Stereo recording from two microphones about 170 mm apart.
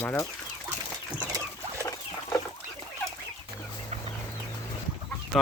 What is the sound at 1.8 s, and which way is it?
Rodents, 20° left (ahead or behind).